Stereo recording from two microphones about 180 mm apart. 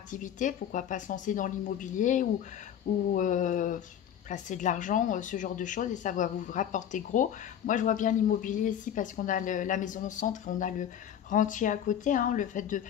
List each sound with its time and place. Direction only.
0.1 s speech: 45° left (ahead or behind)